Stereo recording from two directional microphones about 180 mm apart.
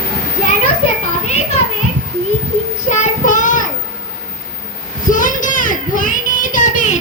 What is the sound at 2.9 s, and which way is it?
Child singing, 45° left (ahead or behind).